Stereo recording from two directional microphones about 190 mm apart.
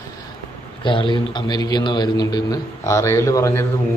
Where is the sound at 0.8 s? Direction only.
25° left (ahead or behind).